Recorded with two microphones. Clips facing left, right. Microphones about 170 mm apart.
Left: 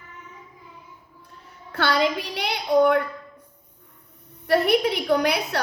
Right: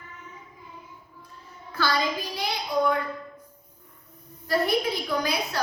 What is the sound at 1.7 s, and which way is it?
A woman's voice, 70° left (ahead or behind).